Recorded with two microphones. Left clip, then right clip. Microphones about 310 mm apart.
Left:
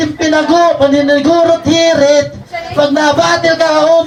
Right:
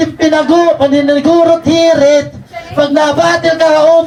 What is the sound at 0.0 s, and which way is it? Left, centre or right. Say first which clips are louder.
Music: right 1 dB; right.